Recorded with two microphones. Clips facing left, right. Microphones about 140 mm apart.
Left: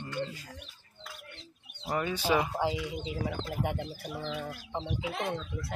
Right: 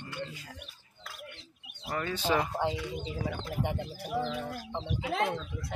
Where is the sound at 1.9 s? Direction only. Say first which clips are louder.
Left 1 dB; 15° left (ahead or behind).